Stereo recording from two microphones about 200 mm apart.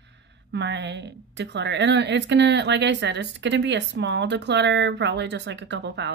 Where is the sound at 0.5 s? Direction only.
60° right (ahead or behind).